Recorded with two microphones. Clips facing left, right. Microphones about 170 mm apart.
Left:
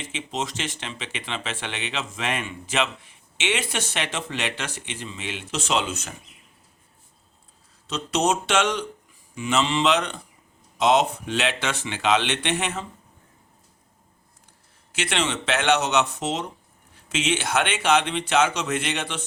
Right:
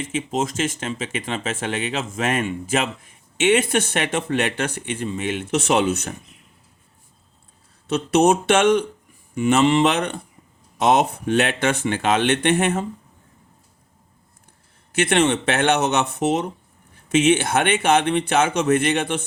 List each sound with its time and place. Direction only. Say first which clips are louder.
0.0 s speech: right 7 dB; 50° right (ahead or behind)
7.9 s speech: right 7 dB; 60° right (ahead or behind)
14.9 s speech: right 8 dB; 55° right (ahead or behind)